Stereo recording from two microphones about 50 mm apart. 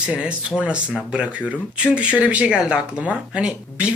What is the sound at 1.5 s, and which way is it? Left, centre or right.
Speech, right.